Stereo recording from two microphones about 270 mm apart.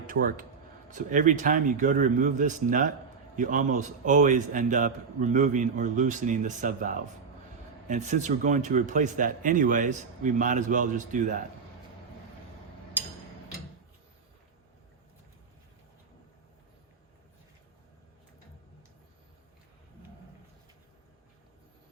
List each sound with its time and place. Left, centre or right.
0.1 s speech: right
7.9 s speech: right